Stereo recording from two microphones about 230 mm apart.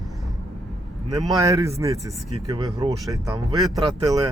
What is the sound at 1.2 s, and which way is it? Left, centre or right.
Speech, centre.